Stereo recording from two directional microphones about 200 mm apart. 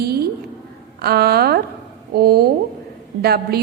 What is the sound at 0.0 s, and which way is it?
A woman's voice, 50° right (ahead or behind).